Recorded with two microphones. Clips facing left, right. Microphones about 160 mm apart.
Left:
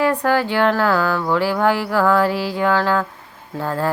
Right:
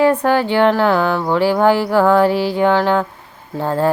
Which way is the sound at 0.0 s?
25° right (ahead or behind).